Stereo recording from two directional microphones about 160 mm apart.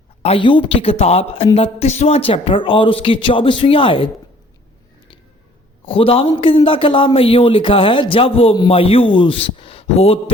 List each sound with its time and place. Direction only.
0.2 s a man's voice: 35° left (ahead or behind)
5.8 s a man's voice: 35° left (ahead or behind)